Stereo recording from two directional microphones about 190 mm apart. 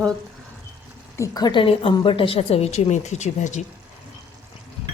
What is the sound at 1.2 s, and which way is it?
A woman's voice, 20° left (ahead or behind).